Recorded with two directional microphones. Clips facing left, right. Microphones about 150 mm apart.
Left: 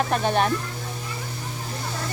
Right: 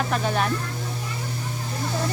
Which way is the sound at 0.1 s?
25° left (ahead or behind).